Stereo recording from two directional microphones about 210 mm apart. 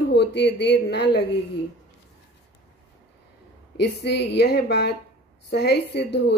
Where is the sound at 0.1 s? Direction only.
55° left (ahead or behind).